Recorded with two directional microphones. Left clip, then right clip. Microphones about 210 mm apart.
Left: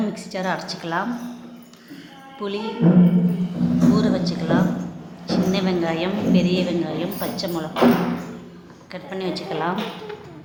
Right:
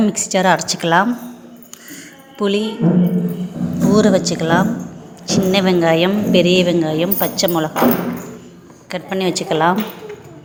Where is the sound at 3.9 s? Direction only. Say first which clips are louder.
Right 8 dB; 35° right (ahead or behind).